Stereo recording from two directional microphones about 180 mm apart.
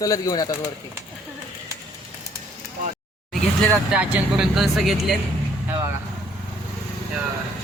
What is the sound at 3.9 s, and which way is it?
Speech, 5° right (ahead or behind).